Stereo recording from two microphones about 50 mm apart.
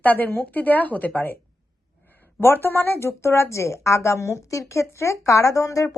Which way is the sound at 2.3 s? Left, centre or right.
Left.